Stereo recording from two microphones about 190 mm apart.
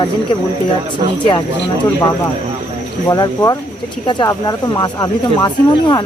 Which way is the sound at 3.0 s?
20° left (ahead or behind).